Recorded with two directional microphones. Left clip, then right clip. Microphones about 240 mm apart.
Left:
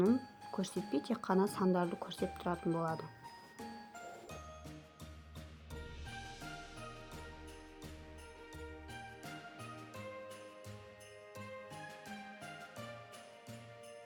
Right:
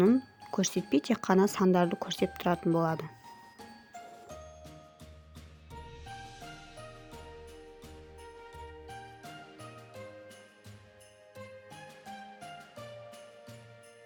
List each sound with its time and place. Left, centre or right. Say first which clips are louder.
0.0 s speech: right 7 dB; right